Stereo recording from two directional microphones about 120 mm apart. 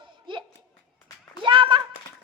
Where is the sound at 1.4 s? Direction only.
45° right (ahead or behind).